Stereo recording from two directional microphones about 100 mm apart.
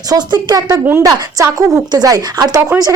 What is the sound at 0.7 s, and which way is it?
Speech, 25° right (ahead or behind).